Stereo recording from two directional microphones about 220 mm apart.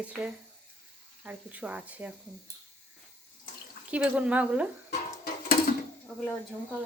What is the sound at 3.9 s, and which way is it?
Speech, 5° right (ahead or behind).